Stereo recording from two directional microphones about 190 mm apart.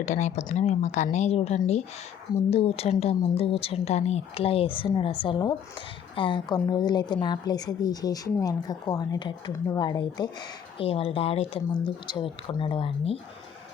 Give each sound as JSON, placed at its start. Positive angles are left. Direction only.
{"t": 0.0, "sound": "a woman's voice", "side_deg": 40}